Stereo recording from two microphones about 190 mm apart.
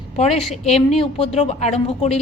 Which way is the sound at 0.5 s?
35° left (ahead or behind).